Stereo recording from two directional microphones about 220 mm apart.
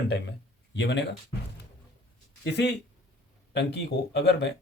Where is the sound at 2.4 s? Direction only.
50° left (ahead or behind).